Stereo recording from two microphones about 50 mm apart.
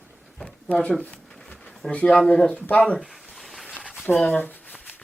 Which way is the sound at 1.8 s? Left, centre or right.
Centre.